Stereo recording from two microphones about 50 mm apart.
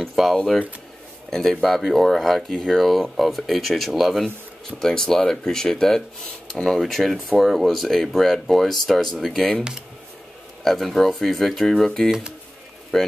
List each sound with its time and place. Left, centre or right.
0.0 s speech: centre
4.7 s speech: centre
10.6 s speech: centre
12.1 s speech: centre
12.9 s speech: centre